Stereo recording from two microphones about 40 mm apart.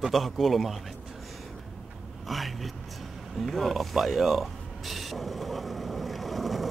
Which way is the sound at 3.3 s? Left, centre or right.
Centre.